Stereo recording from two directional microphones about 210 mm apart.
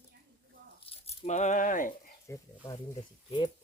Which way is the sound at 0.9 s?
30° left (ahead or behind).